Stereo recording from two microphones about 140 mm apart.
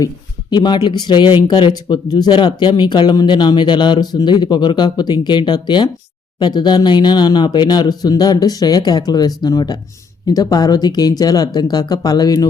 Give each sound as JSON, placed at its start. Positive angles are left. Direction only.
{"t": 0.5, "sound": "speech", "side_deg": 30}